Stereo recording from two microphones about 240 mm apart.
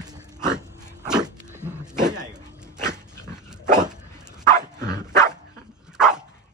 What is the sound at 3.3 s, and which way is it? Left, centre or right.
Dog, centre.